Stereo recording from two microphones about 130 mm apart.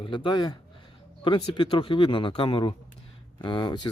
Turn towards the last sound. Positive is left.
turn(degrees=35)  # may be behind; listen again after turning